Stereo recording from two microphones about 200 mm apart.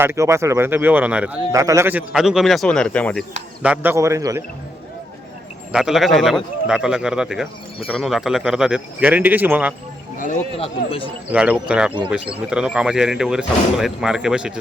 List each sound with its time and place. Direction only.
0.0 s a man's voice: 15° right (ahead or behind); by 3.2 s 5° left (ahead or behind)
3.6 s a man's voice: 10° right (ahead or behind)
5.7 s speech: centre (ahead or behind)
10.6 s speech: 25° left (ahead or behind)
11.3 s speech: 5° right (ahead or behind)